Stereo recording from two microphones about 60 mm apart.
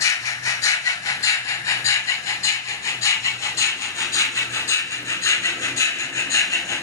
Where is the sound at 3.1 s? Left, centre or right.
Left.